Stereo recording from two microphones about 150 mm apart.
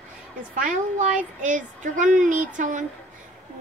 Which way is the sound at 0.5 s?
55° right (ahead or behind).